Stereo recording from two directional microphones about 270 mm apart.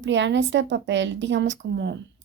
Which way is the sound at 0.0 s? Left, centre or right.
Right.